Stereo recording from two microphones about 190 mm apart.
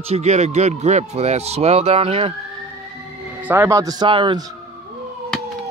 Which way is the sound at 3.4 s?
10° right (ahead or behind).